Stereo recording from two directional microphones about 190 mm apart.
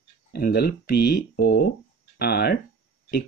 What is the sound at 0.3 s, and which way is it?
Speech, 55° left (ahead or behind).